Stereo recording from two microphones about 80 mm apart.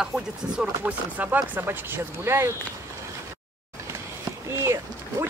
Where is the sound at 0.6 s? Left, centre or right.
Centre.